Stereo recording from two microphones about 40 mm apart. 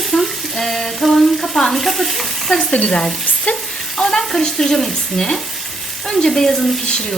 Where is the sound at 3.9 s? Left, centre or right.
Centre.